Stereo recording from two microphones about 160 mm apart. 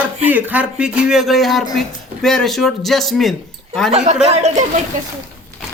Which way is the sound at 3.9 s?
45° right (ahead or behind).